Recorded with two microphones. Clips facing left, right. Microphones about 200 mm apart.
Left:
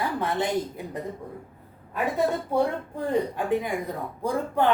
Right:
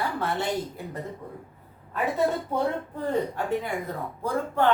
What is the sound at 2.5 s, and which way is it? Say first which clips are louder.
Speech: left 2 dB; 10° left (ahead or behind).